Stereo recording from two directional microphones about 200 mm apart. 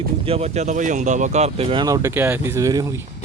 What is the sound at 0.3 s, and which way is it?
Speech, 30° right (ahead or behind).